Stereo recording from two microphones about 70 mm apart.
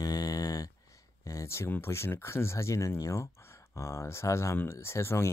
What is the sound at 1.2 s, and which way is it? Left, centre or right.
Speech, left.